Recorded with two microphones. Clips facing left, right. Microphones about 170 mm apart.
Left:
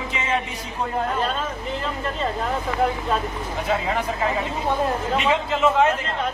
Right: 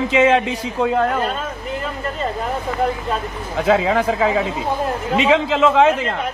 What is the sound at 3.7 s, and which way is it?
Speech, 90° right.